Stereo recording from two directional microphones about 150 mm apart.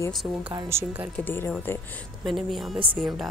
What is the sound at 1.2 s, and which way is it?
Speech, 15° left (ahead or behind).